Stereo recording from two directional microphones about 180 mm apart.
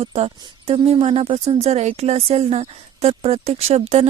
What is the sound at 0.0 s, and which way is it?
Speech, 35° right (ahead or behind).